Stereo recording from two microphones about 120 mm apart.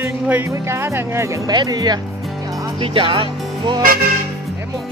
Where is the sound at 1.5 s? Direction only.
35° right (ahead or behind).